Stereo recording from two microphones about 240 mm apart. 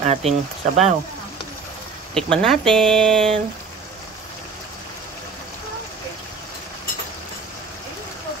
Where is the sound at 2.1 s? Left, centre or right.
Centre.